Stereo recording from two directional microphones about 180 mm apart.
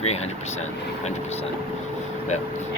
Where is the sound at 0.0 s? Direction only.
35° left (ahead or behind).